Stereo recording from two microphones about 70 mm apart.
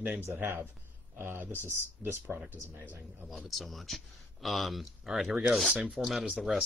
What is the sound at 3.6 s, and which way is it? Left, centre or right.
Speech, centre.